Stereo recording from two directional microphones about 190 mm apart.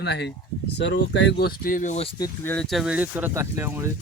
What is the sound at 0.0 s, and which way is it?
Speech, 65° left (ahead or behind).